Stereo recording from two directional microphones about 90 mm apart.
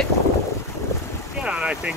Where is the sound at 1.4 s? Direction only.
10° right (ahead or behind).